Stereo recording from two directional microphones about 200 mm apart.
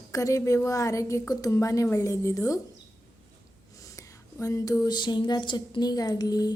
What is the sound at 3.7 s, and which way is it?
Whispering, 15° left (ahead or behind).